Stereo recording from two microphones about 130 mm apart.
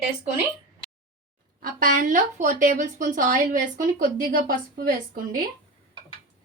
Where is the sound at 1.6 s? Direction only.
90° right.